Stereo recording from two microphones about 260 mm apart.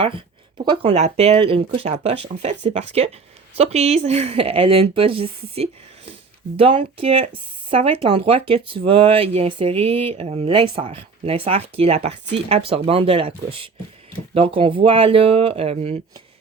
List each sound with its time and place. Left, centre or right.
0.6 s speech: centre